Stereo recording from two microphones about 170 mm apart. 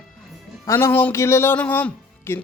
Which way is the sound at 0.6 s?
15° left (ahead or behind).